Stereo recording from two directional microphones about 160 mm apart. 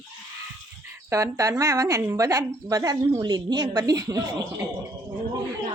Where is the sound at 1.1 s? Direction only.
20° right (ahead or behind).